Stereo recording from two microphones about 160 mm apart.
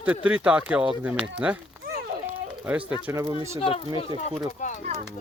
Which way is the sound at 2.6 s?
10° right (ahead or behind).